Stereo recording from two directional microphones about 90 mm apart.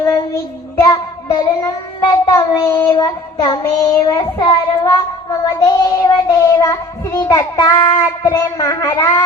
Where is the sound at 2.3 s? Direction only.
40° left (ahead or behind).